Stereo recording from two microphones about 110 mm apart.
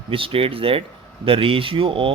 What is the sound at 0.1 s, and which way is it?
Speech, 55° right (ahead or behind).